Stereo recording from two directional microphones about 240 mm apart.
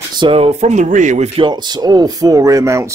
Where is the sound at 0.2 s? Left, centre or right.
Right.